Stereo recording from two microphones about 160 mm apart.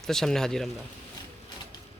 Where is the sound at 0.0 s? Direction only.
5° left (ahead or behind).